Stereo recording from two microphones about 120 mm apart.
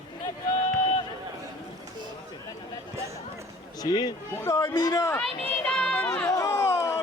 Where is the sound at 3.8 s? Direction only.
35° left (ahead or behind).